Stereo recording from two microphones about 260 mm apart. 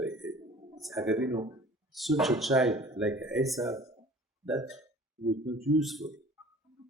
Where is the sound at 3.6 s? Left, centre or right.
Centre.